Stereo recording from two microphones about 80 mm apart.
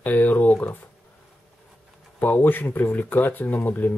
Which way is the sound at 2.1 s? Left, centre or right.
Left.